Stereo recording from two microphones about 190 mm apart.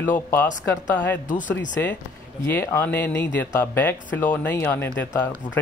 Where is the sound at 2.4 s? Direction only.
15° left (ahead or behind).